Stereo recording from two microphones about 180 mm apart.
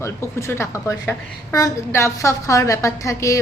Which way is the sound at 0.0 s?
15° left (ahead or behind).